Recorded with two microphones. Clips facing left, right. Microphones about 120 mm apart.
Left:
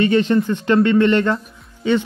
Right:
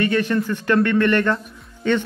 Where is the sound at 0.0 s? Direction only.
25° left (ahead or behind).